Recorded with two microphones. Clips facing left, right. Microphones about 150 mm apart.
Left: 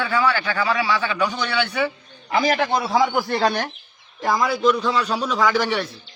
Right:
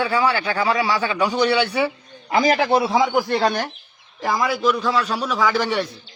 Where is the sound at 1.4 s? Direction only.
35° right (ahead or behind).